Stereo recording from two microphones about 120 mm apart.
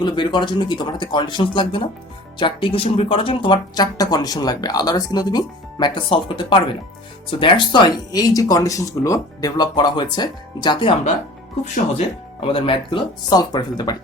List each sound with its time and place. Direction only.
0.0 s speech: 40° left (ahead or behind)
12.4 s speech: 50° left (ahead or behind)